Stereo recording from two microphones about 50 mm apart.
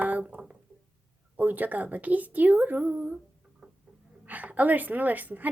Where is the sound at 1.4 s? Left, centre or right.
Right.